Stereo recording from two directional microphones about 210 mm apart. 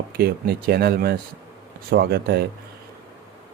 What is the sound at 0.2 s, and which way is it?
Speech, 50° right (ahead or behind).